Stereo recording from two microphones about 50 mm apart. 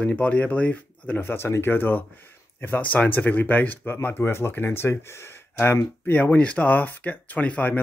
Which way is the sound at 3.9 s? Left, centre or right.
Left.